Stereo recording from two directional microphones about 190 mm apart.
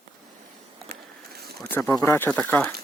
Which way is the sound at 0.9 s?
55° right (ahead or behind).